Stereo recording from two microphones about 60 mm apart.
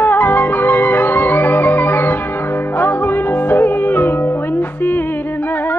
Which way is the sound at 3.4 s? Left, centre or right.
Left.